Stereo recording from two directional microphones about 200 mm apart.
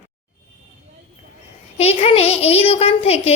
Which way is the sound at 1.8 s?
30° left (ahead or behind).